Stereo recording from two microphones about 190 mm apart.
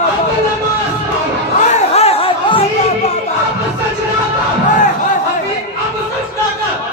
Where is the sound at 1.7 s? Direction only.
30° left (ahead or behind).